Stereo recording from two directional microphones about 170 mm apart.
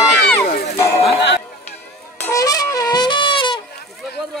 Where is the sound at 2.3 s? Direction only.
20° left (ahead or behind).